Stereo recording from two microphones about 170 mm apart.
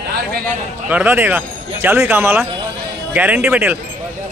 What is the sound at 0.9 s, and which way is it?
Speech, 10° right (ahead or behind).